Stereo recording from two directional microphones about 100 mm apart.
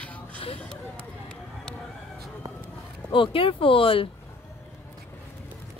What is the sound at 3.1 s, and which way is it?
Speech, 60° left (ahead or behind).